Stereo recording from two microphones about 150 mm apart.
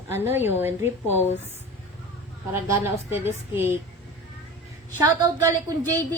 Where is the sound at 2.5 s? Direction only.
15° right (ahead or behind).